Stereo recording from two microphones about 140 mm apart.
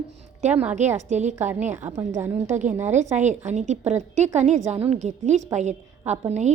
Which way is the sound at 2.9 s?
55° right (ahead or behind).